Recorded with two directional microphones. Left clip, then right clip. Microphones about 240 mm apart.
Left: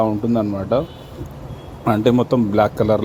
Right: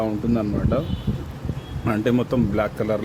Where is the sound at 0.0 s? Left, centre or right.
Centre.